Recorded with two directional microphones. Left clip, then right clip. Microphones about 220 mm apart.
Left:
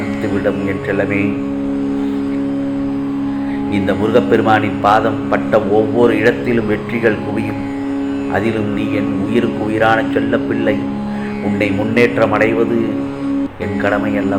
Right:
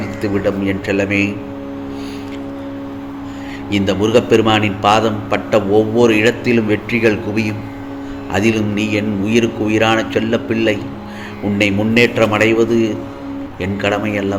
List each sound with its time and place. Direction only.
0.4 s a man's voice: 50° right (ahead or behind)
3.8 s a man's voice: 40° right (ahead or behind)
13.8 s a man's voice: 45° right (ahead or behind)